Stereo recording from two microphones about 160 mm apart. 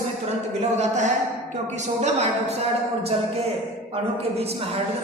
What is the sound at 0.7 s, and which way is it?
Music, 50° right (ahead or behind).